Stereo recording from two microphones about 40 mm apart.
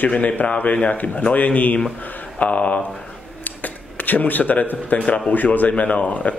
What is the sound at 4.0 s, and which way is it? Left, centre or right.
A man's voice, left.